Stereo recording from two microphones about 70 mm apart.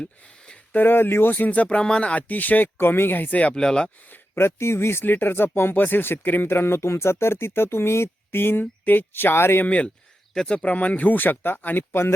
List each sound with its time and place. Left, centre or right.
0.0 s a sound: centre
0.8 s speech: left
3.5 s speech: centre
4.1 s speech: left
9.6 s speech: centre